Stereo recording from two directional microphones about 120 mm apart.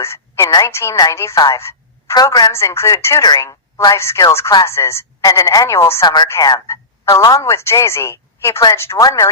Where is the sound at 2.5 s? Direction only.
20° left (ahead or behind).